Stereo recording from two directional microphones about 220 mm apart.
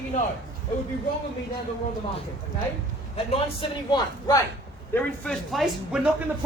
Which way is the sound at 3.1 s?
25° left (ahead or behind).